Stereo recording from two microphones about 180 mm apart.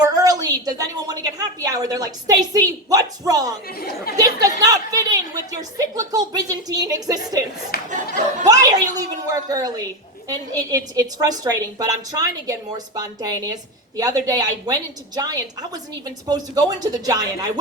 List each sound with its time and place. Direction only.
0.0 s a woman's voice: 20° right (ahead or behind)
3.8 s speech: 60° left (ahead or behind)
4.2 s a woman's voice: 20° right (ahead or behind)
7.7 s clapping: 60° left (ahead or behind)
8.4 s a woman's voice: 20° right (ahead or behind)